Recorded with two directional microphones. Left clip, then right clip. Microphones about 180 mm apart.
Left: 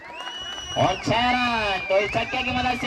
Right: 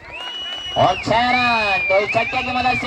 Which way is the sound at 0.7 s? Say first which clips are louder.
Right 6 dB; 35° right (ahead or behind).